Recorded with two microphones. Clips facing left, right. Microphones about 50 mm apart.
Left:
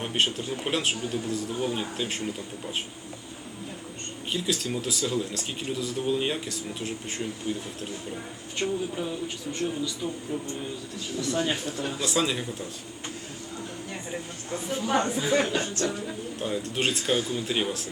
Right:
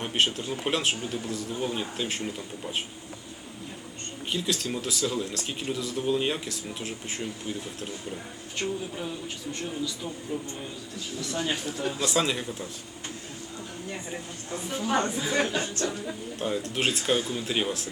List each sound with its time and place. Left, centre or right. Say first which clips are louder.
0.0 s speech: even; centre
4.3 s speech: left 1 dB; centre
8.5 s speech: left 3 dB; centre
11.2 s speech: left 3 dB; centre
13.9 s speech: left 1 dB; centre